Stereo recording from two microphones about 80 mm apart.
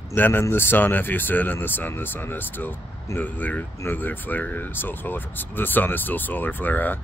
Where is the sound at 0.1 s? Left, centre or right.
Left.